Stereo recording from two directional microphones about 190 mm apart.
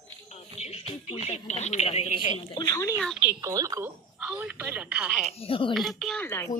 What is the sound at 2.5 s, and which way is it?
Speech, 20° left (ahead or behind).